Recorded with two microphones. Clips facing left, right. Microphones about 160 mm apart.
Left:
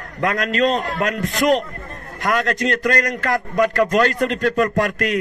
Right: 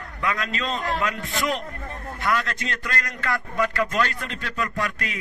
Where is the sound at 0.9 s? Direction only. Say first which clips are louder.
Left 4 dB; 45° left (ahead or behind).